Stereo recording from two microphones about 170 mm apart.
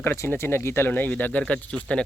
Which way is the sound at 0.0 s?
15° left (ahead or behind).